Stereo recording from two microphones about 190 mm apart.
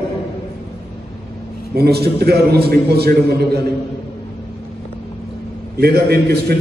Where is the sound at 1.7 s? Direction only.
55° right (ahead or behind).